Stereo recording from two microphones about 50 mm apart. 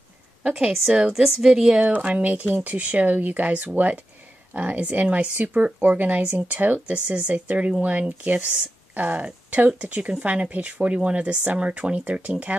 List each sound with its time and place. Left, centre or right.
0.4 s a woman's voice: centre